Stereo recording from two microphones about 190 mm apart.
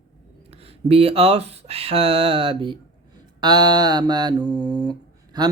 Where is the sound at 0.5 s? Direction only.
30° right (ahead or behind).